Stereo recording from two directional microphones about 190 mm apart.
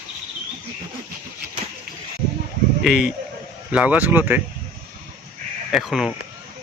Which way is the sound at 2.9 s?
Centre (ahead or behind).